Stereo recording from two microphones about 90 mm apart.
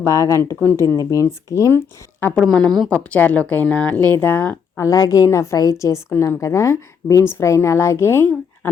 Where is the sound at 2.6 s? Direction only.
55° right (ahead or behind).